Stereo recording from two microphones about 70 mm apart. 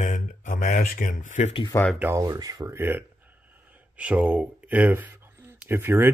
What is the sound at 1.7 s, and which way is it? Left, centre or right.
Speech, left.